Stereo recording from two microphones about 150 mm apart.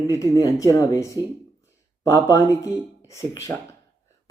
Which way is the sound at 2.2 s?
20° left (ahead or behind).